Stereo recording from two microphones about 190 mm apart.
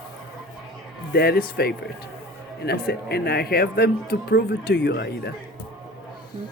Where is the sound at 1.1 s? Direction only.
55° left (ahead or behind).